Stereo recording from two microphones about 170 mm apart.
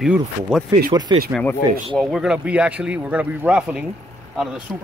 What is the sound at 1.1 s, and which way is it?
Speech, 30° right (ahead or behind).